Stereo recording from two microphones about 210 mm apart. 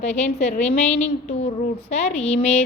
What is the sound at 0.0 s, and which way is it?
A woman's voice, 30° left (ahead or behind).